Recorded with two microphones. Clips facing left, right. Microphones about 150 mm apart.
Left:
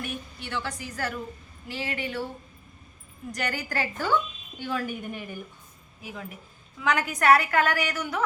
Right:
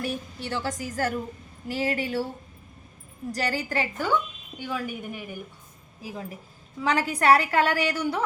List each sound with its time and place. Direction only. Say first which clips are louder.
0.0 s a woman's voice: right 5 dB; 35° right (ahead or behind)
3.3 s a woman's voice: right 3 dB; 30° right (ahead or behind); by 5.4 s 10° right (ahead or behind)
6.0 s a woman's voice: right 3 dB; 35° right (ahead or behind)